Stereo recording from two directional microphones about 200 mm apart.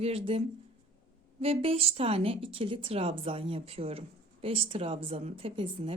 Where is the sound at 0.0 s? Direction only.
30° right (ahead or behind).